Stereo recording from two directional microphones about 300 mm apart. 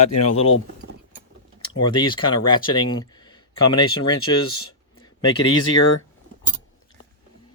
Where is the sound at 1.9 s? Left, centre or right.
Centre.